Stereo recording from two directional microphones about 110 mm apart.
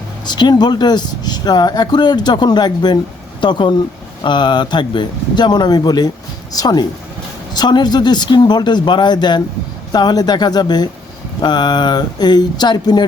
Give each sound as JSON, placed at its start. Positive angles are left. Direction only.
{"t": 0.3, "sound": "speech", "side_deg": 40}